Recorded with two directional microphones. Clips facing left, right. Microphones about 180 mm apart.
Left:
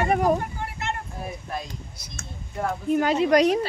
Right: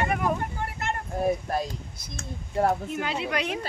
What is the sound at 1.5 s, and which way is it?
Speech, 40° right (ahead or behind).